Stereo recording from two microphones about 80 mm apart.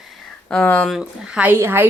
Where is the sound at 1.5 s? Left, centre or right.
Right.